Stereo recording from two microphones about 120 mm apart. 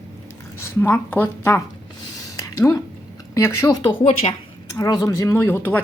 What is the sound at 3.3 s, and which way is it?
Speech, 25° left (ahead or behind).